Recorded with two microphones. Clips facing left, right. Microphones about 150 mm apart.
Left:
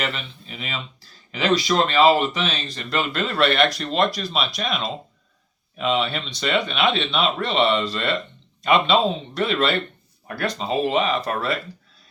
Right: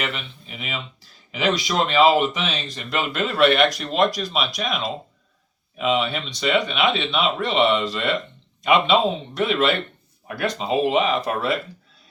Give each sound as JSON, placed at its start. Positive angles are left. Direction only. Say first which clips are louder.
{"t": 0.0, "sound": "speech", "louder": "left 1 dB", "side_deg": -15}